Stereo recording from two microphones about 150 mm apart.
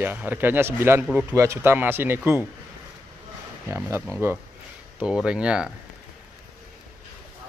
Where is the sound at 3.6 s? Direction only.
15° right (ahead or behind).